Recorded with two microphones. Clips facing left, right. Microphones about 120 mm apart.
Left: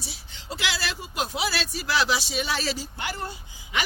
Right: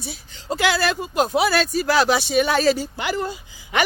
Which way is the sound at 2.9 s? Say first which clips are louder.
Right 8 dB; 90° right.